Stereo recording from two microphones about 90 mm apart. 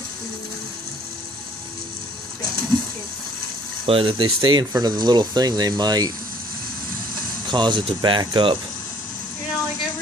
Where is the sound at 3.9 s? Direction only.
85° right; by 6.1 s 45° right (ahead or behind).